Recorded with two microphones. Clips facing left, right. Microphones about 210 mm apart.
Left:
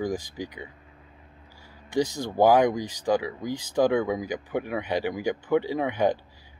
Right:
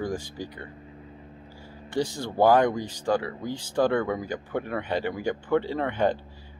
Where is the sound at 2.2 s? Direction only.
15° left (ahead or behind).